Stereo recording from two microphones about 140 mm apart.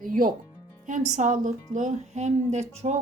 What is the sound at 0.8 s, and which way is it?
A woman's voice, 60° right (ahead or behind).